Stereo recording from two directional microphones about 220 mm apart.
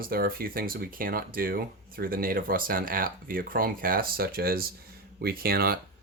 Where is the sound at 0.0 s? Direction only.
40° right (ahead or behind).